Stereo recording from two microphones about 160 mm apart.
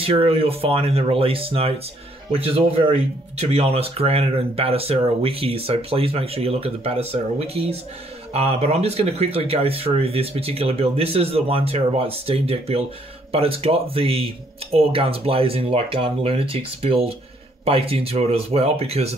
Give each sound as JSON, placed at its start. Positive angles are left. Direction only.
{"t": 0.0, "sound": "speech", "side_deg": -35}